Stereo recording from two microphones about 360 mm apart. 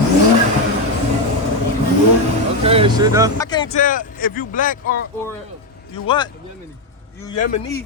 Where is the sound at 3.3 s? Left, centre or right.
Centre.